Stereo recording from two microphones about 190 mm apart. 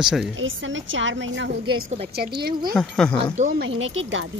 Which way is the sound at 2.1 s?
55° right (ahead or behind).